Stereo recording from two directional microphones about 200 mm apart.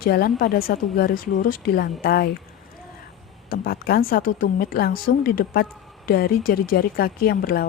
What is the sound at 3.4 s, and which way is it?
A woman's voice, 50° left (ahead or behind).